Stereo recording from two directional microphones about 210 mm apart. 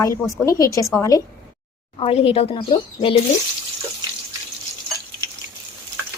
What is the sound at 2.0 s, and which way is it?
Speech, 30° left (ahead or behind).